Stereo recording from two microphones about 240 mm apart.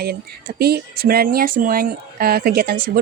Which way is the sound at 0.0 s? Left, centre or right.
Right.